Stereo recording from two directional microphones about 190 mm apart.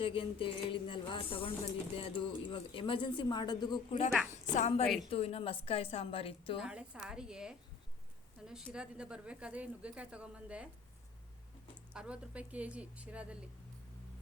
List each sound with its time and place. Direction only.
0.0 s a woman's voice: 30° left (ahead or behind)
6.6 s a woman's voice: 5° right (ahead or behind)
11.9 s speech: 5° right (ahead or behind)